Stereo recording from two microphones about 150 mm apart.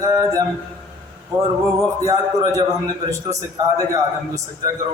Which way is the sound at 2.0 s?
25° right (ahead or behind).